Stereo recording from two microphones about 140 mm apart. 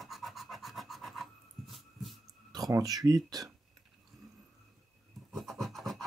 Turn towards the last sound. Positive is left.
turn(degrees=0)  # may be behind; listen again after turning